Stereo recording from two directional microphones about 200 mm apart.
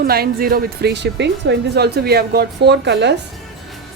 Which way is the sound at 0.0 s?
50° right (ahead or behind).